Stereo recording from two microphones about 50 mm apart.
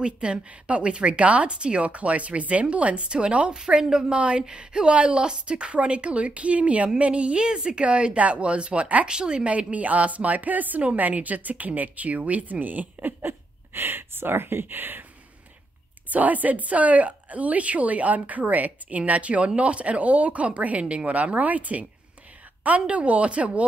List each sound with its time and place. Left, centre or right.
0.0 s speech: centre; by 15.0 s right
16.1 s speech: right